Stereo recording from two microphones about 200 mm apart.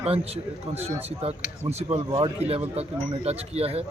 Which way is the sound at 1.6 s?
35° right (ahead or behind).